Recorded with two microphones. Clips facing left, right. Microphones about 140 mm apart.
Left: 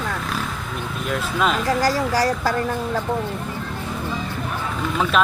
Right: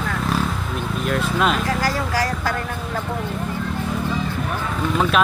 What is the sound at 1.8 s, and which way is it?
Speech, 35° left (ahead or behind).